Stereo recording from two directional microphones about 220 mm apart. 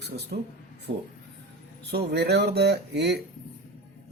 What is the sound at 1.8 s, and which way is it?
Speech, 50° right (ahead or behind).